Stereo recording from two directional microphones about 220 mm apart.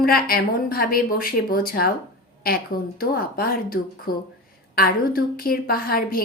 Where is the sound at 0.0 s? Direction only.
40° left (ahead or behind).